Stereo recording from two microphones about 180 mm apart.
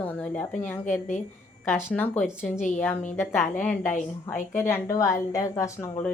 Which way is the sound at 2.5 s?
40° left (ahead or behind).